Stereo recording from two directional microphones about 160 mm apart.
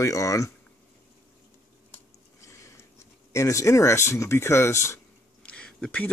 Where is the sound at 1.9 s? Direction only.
20° left (ahead or behind).